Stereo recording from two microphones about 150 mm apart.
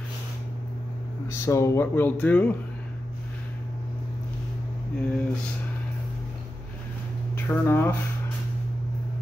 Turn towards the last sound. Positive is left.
turn(degrees=15)  # may be behind; listen again after turning